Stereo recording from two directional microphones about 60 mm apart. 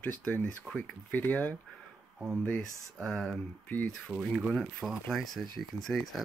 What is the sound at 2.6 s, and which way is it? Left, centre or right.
Speech, centre.